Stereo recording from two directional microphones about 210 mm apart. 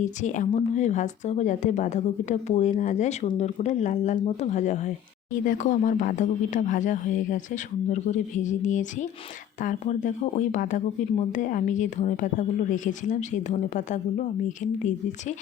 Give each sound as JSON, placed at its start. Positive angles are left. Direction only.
{"t": 0.0, "sound": "speech", "side_deg": 35}